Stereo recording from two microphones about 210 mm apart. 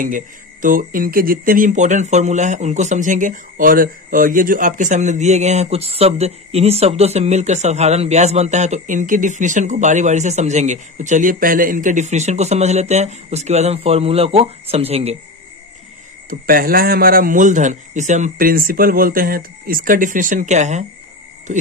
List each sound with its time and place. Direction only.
0.0 s speech: 40° right (ahead or behind)
16.3 s speech: 45° right (ahead or behind)